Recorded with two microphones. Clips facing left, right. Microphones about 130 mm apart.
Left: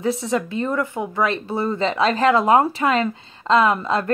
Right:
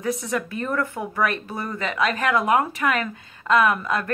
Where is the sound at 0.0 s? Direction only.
25° left (ahead or behind).